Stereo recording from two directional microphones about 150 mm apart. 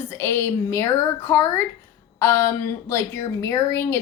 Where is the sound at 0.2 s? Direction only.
15° left (ahead or behind).